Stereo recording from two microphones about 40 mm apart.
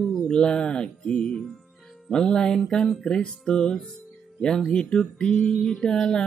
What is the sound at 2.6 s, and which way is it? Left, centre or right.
Speech, centre.